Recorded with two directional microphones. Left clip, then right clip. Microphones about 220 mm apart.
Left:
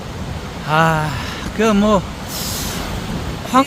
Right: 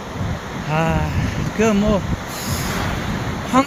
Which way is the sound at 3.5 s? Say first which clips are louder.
Left 3 dB; 5° left (ahead or behind).